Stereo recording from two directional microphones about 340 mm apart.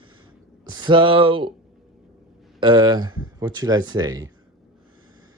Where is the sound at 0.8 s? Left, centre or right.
Centre.